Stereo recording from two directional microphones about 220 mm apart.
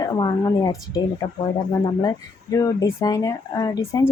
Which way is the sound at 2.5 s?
15° left (ahead or behind).